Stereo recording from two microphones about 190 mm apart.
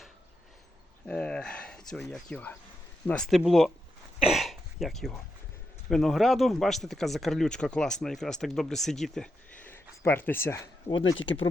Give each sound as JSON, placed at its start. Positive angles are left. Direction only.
{"t": 1.0, "sound": "speech", "side_deg": 5}
{"t": 11.0, "sound": "speech", "side_deg": 90}